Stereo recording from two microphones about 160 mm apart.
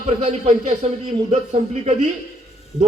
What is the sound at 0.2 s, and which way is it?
Speech, 45° right (ahead or behind).